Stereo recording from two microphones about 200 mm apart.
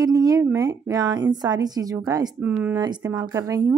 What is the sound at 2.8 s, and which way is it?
Speech, 20° right (ahead or behind).